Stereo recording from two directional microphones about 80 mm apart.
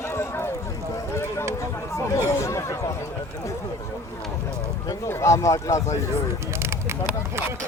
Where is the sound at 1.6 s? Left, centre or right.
Left.